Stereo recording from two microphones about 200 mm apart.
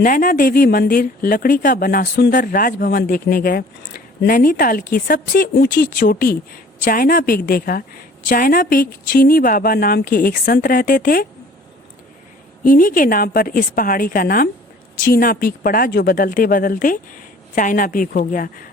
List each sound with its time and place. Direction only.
0.0 s speech: 45° left (ahead or behind)
12.6 s speech: 45° left (ahead or behind)